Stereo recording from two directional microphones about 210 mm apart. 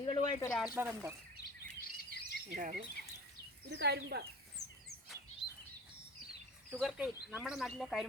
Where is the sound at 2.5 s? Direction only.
40° right (ahead or behind).